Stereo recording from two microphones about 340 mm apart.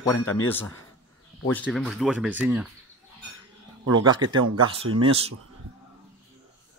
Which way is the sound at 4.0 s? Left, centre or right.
Centre.